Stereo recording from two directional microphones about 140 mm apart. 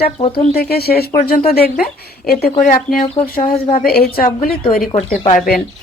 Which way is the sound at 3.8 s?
90° left.